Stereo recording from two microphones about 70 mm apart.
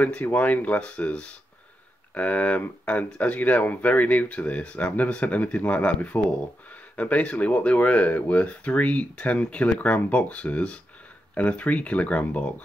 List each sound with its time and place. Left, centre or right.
0.0 s speech: left